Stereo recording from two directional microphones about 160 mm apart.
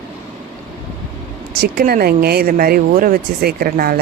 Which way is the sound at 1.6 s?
65° right (ahead or behind).